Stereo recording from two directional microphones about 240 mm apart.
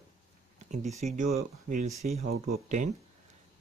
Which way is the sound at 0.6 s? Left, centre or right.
Right.